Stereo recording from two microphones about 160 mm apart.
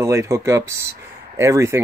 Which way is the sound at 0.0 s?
20° right (ahead or behind).